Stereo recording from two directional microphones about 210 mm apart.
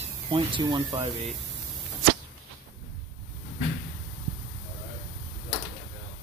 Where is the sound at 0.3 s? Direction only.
25° right (ahead or behind).